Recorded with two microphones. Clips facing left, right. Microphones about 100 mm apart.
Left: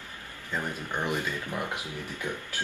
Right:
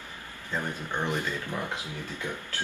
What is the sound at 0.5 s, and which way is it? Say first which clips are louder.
Speech: even; 15° left (ahead or behind).